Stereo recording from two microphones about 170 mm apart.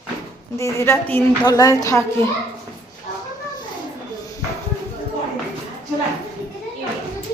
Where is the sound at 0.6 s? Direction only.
15° left (ahead or behind).